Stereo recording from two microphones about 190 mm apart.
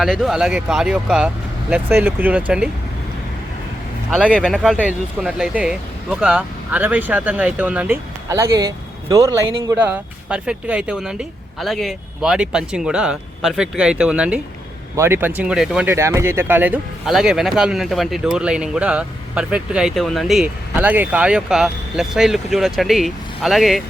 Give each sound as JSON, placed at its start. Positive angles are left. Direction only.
{"t": 0.0, "sound": "speech", "side_deg": 0}
{"t": 4.1, "sound": "speech", "side_deg": -5}